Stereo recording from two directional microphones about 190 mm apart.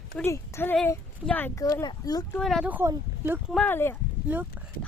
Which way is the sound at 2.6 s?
10° right (ahead or behind).